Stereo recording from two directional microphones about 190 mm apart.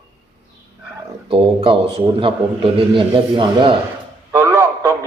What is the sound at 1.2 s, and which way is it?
A man's voice, 30° right (ahead or behind).